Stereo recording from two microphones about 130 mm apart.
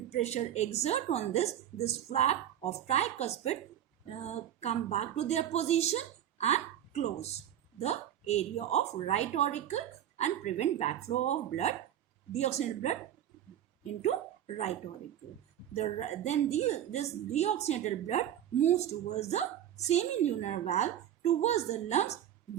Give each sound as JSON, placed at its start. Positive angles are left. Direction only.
{"t": 0.1, "sound": "a woman's voice", "side_deg": 55}
{"t": 15.7, "sound": "a woman's voice", "side_deg": 60}